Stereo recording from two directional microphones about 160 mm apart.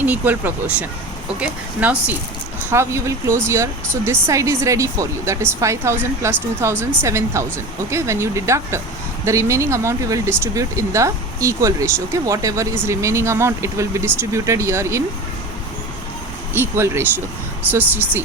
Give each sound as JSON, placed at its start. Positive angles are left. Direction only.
{"t": 0.0, "sound": "speech", "side_deg": -10}
{"t": 16.6, "sound": "speech", "side_deg": -15}